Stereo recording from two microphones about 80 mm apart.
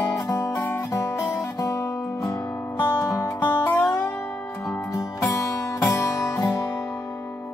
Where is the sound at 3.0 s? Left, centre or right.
Centre.